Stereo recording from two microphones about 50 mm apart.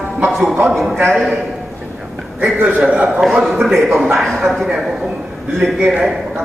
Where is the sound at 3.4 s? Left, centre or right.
Centre.